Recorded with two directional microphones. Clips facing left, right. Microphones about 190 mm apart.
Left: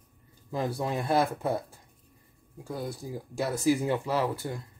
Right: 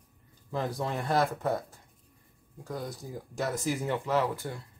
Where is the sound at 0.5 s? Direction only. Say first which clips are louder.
Left 2 dB; 10° left (ahead or behind).